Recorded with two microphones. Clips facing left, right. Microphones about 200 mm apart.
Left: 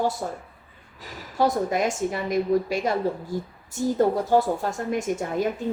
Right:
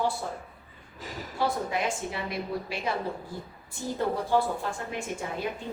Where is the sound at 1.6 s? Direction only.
45° left (ahead or behind).